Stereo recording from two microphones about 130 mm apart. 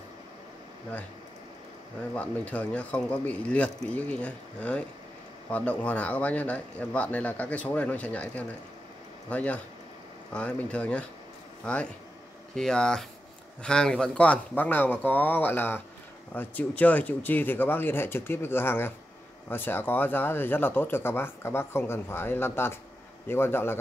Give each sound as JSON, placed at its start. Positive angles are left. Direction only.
{"t": 2.1, "sound": "speech", "side_deg": 10}